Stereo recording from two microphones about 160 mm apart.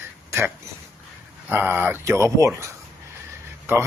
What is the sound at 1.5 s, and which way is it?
Speech, 15° right (ahead or behind).